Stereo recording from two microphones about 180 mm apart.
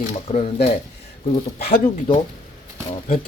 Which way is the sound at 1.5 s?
55° left (ahead or behind).